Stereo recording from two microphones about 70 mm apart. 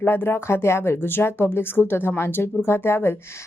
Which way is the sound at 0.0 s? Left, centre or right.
Left.